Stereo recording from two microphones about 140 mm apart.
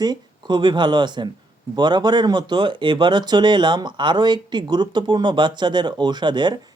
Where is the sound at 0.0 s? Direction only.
30° right (ahead or behind).